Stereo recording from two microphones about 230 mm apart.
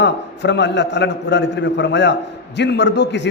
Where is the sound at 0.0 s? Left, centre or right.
Left.